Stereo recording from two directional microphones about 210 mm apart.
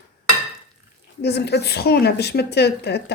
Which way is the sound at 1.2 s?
55° left (ahead or behind).